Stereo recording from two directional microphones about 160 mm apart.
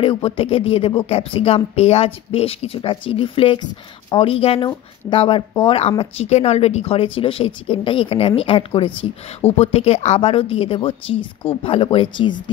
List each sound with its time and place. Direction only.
0.0 s speech: 35° left (ahead or behind)